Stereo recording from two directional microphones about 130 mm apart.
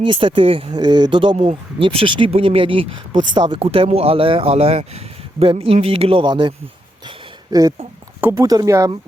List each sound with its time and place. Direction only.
0.0 s speech: 40° right (ahead or behind)
3.6 s speech: 50° right (ahead or behind)
8.2 s speech: 15° right (ahead or behind)